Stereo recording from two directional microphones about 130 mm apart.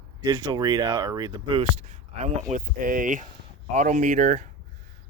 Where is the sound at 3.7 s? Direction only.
70° right (ahead or behind).